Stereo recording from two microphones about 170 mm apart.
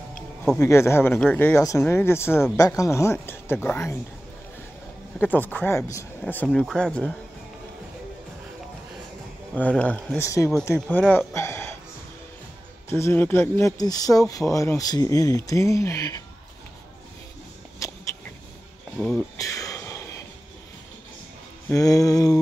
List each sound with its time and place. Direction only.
0.6 s speech: 15° left (ahead or behind)
5.2 s speech: 10° left (ahead or behind)
9.5 s speech: 5° left (ahead or behind)
10.2 s speech: 20° left (ahead or behind)
12.9 s speech: 15° left (ahead or behind)
17.8 s a sound: 20° left (ahead or behind)
18.9 s speech: 5° left (ahead or behind)
19.3 s a sound: 20° left (ahead or behind)
21.6 s speech: 20° left (ahead or behind)